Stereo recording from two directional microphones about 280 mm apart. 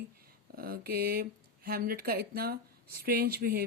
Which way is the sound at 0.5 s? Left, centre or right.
Right.